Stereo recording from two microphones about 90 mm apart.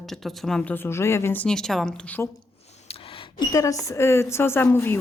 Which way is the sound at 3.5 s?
40° left (ahead or behind).